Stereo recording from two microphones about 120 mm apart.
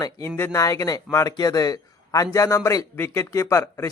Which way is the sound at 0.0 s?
25° left (ahead or behind).